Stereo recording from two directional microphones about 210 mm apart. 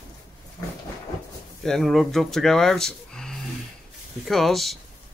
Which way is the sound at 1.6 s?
Centre (ahead or behind).